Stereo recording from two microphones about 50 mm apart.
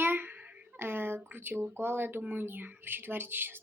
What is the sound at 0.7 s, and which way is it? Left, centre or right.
Speech, right.